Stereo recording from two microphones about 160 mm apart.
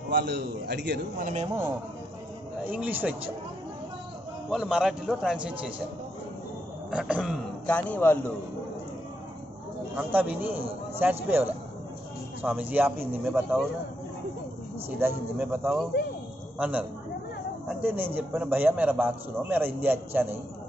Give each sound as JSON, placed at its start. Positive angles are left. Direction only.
{"t": 0.1, "sound": "a man's voice", "side_deg": -90}
{"t": 1.2, "sound": "a man's voice", "side_deg": -45}
{"t": 2.7, "sound": "a man's voice", "side_deg": -10}
{"t": 4.5, "sound": "a man's voice", "side_deg": -5}
{"t": 6.9, "sound": "a man's voice", "side_deg": -5}
{"t": 7.6, "sound": "a man's voice", "side_deg": 10}
{"t": 9.9, "sound": "a man's voice", "side_deg": -10}
{"t": 14.9, "sound": "a man's voice", "side_deg": -10}